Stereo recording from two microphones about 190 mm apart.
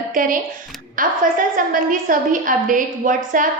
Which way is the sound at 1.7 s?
45° right (ahead or behind).